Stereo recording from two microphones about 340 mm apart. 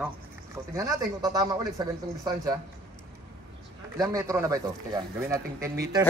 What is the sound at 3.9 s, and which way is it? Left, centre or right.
Speech, centre.